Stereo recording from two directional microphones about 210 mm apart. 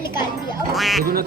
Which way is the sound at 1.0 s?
45° right (ahead or behind).